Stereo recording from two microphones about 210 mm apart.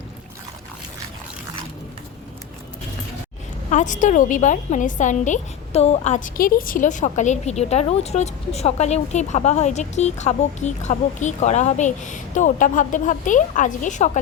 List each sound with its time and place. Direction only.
3.7 s a woman's voice: 35° left (ahead or behind)